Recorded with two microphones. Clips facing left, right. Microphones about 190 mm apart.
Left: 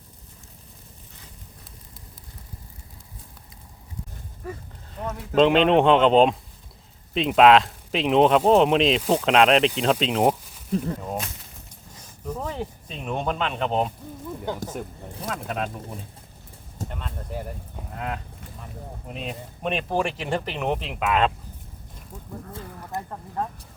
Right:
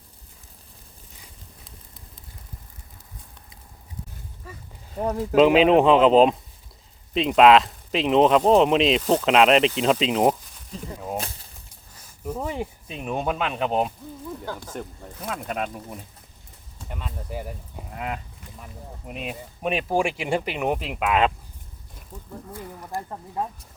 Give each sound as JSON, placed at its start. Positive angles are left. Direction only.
{"t": 4.9, "sound": "speech", "side_deg": -35}
{"t": 5.3, "sound": "speech", "side_deg": -5}
{"t": 10.7, "sound": "speech", "side_deg": 60}
{"t": 11.2, "sound": "speech", "side_deg": -30}
{"t": 12.2, "sound": "speech", "side_deg": -10}
{"t": 17.9, "sound": "livestock", "side_deg": -5}
{"t": 19.0, "sound": "speech", "side_deg": -5}
{"t": 22.1, "sound": "speech", "side_deg": 10}
{"t": 22.9, "sound": "speech", "side_deg": 20}
{"t": 23.4, "sound": "speech", "side_deg": -10}